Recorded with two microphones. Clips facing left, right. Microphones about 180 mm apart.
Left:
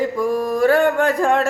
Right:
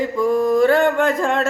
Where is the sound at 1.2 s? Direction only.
15° left (ahead or behind).